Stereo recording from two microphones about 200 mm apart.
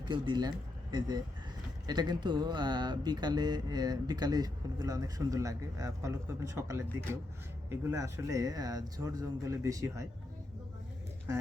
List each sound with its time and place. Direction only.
0.0 s speech: 25° right (ahead or behind)